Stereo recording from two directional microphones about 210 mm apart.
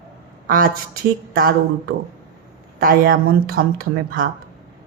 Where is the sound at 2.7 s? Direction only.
45° right (ahead or behind).